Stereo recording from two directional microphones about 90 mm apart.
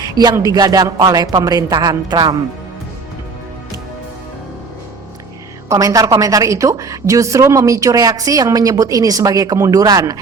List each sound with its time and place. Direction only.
0.0 s music: 50° right (ahead or behind)
0.4 s speech: 45° right (ahead or behind)
5.6 s a woman's voice: 40° right (ahead or behind)